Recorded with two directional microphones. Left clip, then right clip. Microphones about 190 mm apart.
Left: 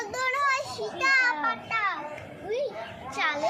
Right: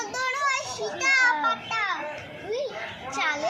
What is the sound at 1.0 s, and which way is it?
Speech, 25° left (ahead or behind).